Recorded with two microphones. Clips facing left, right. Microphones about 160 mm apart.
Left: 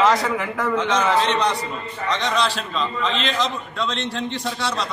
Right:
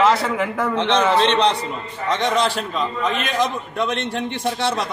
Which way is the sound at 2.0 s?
55° right (ahead or behind).